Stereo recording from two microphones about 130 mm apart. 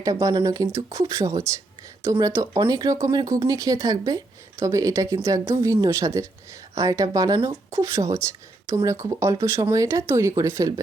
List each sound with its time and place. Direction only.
0.0 s speech: 25° right (ahead or behind)